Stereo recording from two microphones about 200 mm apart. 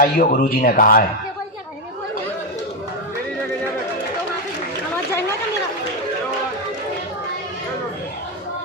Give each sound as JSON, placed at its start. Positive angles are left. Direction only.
{"t": 0.0, "sound": "speech", "side_deg": 45}